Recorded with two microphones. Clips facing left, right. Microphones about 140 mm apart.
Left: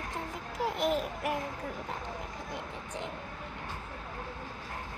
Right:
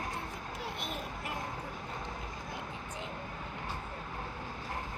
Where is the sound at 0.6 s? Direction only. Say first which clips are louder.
Left 12 dB; 90° left.